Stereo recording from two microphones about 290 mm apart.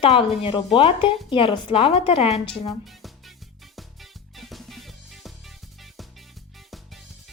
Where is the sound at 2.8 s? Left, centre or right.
Centre.